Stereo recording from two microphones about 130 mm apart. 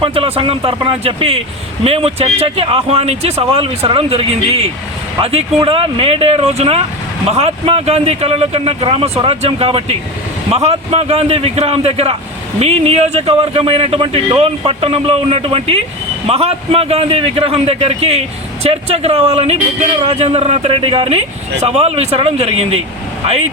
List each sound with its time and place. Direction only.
0.0 s speech: 45° right (ahead or behind)